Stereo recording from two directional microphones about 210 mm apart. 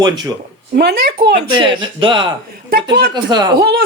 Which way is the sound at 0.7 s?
50° right (ahead or behind).